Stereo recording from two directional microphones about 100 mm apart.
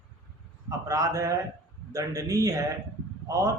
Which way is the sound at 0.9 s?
30° right (ahead or behind).